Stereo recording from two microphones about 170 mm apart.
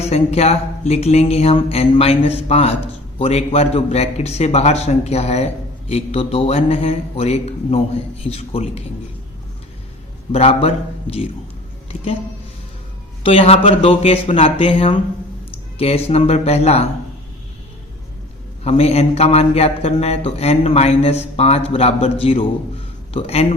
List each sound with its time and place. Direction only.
0.0 s a man's voice: 40° left (ahead or behind)
10.3 s a man's voice: 35° left (ahead or behind)
13.2 s a man's voice: 35° left (ahead or behind)
18.6 s a man's voice: 35° left (ahead or behind)